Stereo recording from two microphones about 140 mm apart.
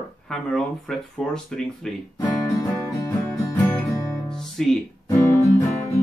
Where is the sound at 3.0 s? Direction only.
20° left (ahead or behind).